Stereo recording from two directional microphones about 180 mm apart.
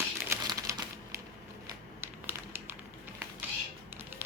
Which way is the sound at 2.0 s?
15° right (ahead or behind).